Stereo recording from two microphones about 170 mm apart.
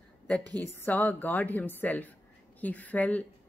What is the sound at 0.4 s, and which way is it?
Speech, 20° right (ahead or behind).